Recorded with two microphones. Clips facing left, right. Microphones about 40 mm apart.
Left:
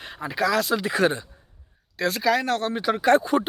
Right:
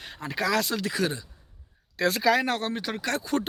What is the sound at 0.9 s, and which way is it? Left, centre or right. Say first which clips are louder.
Speech: left 8 dB; left.